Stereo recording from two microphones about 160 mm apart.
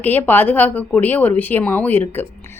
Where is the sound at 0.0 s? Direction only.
10° left (ahead or behind).